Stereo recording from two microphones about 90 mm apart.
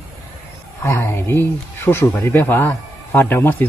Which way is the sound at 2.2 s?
20° left (ahead or behind).